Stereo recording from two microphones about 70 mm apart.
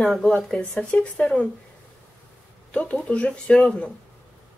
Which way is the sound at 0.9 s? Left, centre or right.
Centre.